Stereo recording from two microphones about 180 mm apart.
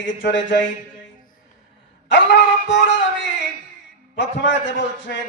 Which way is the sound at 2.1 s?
80° left.